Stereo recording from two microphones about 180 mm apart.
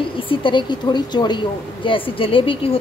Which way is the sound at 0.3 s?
30° left (ahead or behind).